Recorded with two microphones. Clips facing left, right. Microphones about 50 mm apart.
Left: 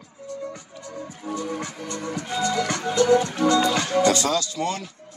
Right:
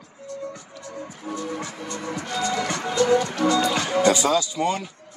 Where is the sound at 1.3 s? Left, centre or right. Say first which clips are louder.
Left 1 dB; right.